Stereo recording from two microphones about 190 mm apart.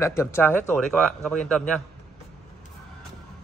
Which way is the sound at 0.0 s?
15° left (ahead or behind).